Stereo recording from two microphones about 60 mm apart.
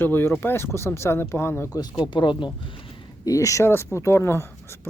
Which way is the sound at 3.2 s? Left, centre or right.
Left.